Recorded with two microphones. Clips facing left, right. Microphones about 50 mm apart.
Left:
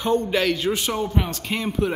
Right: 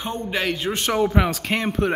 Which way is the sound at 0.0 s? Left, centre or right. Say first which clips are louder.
Left 5 dB; right.